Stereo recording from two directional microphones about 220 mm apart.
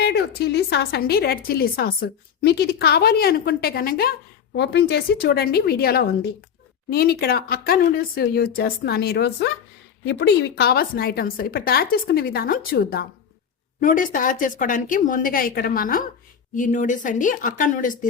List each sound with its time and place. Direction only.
0.0 s a woman's voice: 50° left (ahead or behind)